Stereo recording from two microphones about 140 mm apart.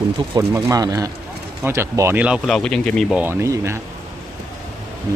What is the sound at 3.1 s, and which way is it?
Speech, 15° right (ahead or behind).